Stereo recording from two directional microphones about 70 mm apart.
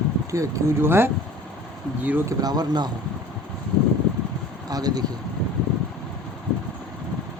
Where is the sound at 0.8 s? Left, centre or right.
Right.